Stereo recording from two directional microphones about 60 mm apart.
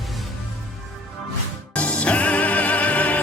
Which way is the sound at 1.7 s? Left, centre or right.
Left.